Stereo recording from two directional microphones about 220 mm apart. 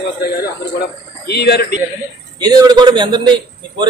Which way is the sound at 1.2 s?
45° left (ahead or behind).